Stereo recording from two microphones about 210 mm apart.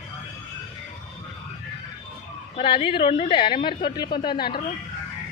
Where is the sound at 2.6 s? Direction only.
25° left (ahead or behind).